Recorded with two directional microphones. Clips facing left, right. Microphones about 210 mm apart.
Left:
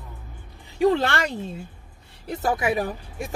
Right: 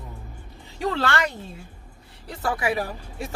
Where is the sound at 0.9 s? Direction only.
20° left (ahead or behind).